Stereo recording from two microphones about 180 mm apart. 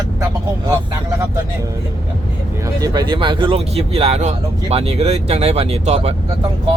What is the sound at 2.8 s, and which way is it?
Speech, 25° right (ahead or behind).